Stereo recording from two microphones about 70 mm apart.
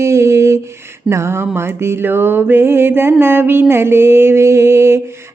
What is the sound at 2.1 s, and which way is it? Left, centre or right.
Mantra, right.